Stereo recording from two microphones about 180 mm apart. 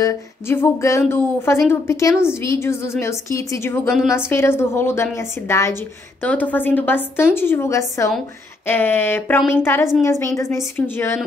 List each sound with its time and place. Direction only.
0.0 s speech: 15° left (ahead or behind)